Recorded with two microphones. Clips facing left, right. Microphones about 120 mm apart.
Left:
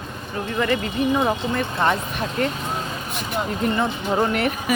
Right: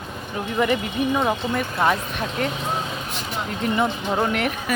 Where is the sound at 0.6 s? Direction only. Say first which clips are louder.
Right 1 dB; 15° right (ahead or behind).